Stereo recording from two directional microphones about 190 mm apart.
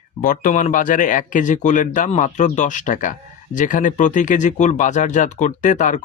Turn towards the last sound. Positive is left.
turn(degrees=40)  # may be behind; listen again after turning